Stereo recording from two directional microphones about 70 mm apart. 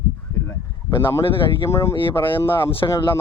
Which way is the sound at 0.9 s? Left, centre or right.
Left.